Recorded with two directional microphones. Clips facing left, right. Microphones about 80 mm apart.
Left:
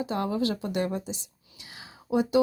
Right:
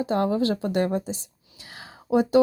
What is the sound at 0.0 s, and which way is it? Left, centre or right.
Speech, right.